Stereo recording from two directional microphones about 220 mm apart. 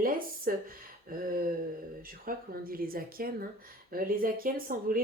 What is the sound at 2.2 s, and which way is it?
A woman's voice, 40° right (ahead or behind).